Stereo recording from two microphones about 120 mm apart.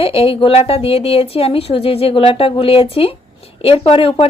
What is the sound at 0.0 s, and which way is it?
A woman's voice, 55° left (ahead or behind).